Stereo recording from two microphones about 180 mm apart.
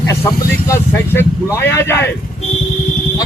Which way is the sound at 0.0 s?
15° left (ahead or behind).